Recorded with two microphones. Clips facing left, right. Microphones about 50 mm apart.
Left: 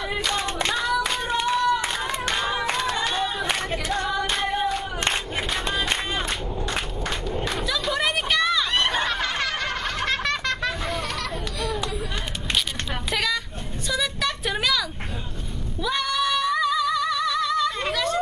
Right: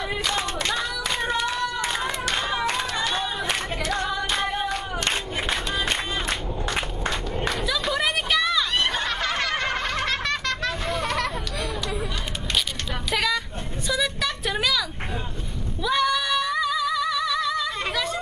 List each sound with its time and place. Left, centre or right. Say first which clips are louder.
0.1 s singing: left 2 dB; centre
0.7 s clapping: left 3 dB; centre
1.9 s a sound: right 1 dB; centre
2.3 s clapping: left 2 dB; centre
3.1 s crowd: left 1 dB; centre
3.4 s singing: left 1 dB; centre
4.3 s music: left 1 dB; centre
5.8 s music: left 1 dB; centre
7.6 s a sound: even; centre
13.1 s a sound: right 2 dB; centre
15.8 s female singing: right 2 dB; centre